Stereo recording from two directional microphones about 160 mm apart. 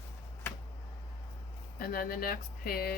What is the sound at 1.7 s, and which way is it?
Speech, 65° left (ahead or behind).